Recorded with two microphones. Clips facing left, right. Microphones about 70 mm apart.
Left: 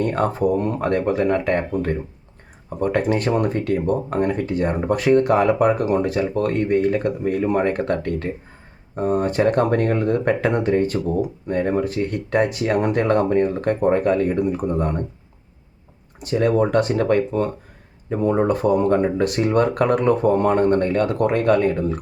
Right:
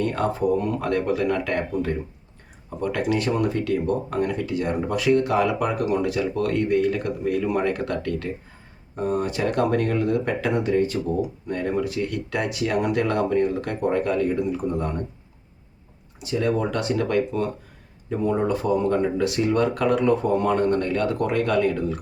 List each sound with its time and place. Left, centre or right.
0.0 s speech: left
16.2 s speech: left